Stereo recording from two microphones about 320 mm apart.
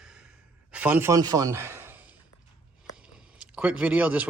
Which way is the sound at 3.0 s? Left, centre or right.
Centre.